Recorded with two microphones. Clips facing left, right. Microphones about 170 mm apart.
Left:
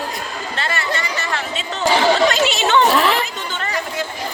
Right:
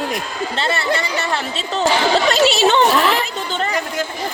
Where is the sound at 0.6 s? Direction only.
30° right (ahead or behind).